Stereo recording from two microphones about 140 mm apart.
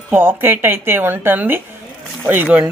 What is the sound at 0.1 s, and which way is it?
A woman's voice, 15° right (ahead or behind).